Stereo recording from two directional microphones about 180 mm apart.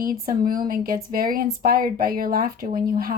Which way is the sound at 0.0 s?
55° right (ahead or behind).